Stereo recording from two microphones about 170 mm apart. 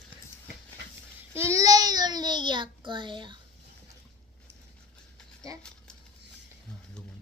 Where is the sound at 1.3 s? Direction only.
15° right (ahead or behind).